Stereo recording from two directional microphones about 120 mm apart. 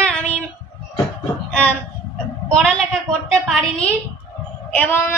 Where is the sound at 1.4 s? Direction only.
10° left (ahead or behind).